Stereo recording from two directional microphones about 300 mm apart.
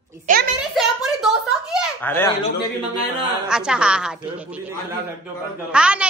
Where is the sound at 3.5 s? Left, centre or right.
Centre.